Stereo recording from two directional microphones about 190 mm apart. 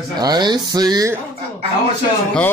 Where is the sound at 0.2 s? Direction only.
20° right (ahead or behind).